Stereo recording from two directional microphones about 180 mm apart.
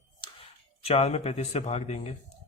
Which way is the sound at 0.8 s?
35° left (ahead or behind).